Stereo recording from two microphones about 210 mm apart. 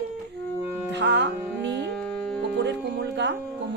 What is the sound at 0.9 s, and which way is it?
Music, 55° right (ahead or behind).